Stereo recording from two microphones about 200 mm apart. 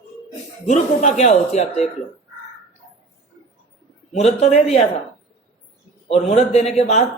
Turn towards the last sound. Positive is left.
turn(degrees=35)  # may be behind; listen again after turning